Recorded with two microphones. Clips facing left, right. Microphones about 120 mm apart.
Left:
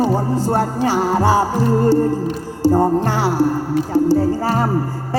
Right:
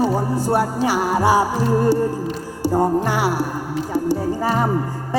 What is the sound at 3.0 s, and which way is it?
Music, 15° right (ahead or behind).